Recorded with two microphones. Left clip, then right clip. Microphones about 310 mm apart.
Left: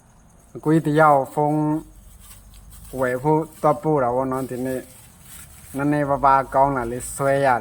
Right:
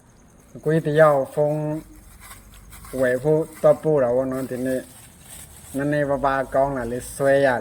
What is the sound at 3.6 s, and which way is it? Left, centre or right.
Speech, centre.